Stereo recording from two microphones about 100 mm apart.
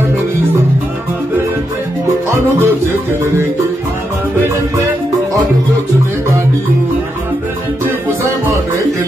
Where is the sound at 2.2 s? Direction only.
25° right (ahead or behind).